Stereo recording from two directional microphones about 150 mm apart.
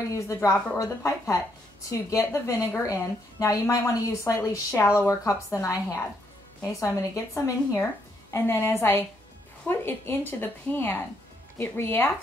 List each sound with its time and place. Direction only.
0.1 s a woman's voice: 20° left (ahead or behind)